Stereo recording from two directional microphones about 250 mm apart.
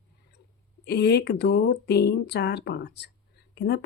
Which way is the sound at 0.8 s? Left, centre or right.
Left.